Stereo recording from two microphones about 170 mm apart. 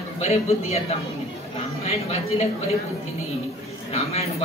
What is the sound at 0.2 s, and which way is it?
A man's voice, 40° left (ahead or behind).